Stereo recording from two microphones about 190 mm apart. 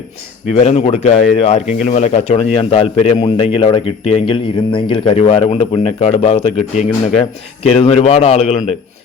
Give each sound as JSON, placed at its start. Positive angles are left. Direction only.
{"t": 0.6, "sound": "a man's voice", "side_deg": 35}